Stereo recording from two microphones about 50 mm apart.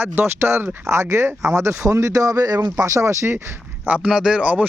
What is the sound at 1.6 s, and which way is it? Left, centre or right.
Speech, right.